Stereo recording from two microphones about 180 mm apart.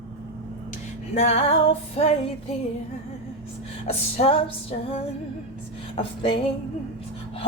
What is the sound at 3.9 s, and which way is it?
Speech, 35° left (ahead or behind).